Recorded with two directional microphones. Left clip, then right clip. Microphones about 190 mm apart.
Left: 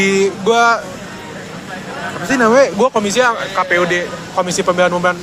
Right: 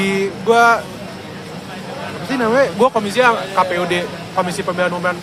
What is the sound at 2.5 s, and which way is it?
Speech, 35° left (ahead or behind).